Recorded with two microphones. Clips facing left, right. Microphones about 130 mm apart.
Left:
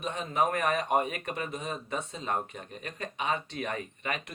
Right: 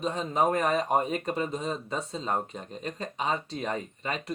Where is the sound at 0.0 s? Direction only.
35° right (ahead or behind).